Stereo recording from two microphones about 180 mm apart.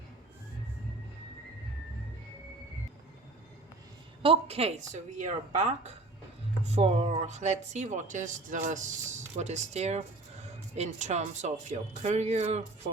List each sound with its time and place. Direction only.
4.2 s speech: 30° right (ahead or behind)